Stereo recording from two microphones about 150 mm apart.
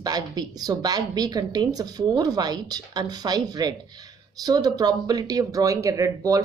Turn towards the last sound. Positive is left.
turn(degrees=-20)  # may be behind; listen again after turning